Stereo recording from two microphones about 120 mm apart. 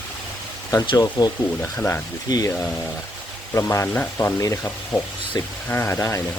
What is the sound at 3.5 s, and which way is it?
Speech, 25° left (ahead or behind).